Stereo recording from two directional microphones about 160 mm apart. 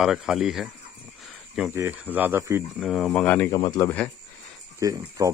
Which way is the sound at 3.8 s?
10° left (ahead or behind).